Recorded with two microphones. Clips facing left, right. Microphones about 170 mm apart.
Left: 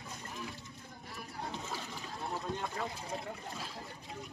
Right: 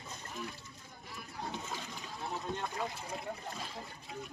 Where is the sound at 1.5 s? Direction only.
Centre (ahead or behind).